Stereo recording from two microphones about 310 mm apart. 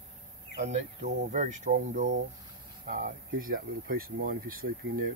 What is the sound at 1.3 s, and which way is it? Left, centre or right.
Speech, right.